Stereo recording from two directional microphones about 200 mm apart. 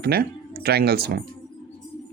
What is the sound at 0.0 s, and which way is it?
Speech, 50° right (ahead or behind).